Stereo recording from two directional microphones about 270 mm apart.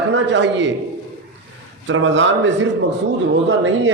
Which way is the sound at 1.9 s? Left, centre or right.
Right.